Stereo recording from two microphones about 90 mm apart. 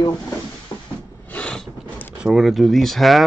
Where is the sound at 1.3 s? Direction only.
15° left (ahead or behind).